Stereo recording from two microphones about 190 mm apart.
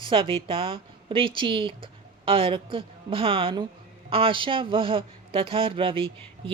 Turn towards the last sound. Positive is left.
turn(degrees=-25)  # may be behind; listen again after turning